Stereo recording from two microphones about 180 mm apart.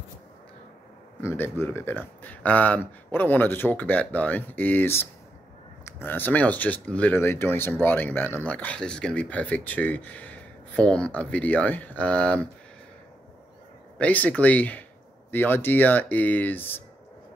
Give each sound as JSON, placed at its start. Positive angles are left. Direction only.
{"t": 1.2, "sound": "speech", "side_deg": 10}
{"t": 13.9, "sound": "speech", "side_deg": 10}